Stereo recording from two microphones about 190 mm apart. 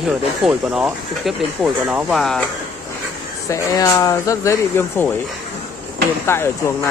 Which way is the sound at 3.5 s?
20° left (ahead or behind).